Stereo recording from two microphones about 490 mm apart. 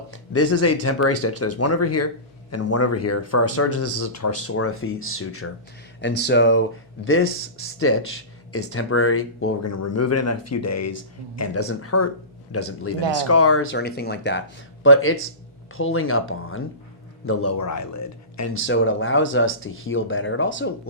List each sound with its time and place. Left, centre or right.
0.3 s speech: left